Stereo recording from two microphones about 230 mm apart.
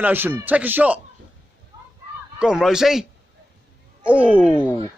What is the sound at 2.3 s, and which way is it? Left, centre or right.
Speech, centre.